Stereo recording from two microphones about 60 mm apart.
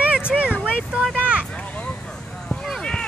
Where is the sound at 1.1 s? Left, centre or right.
Right.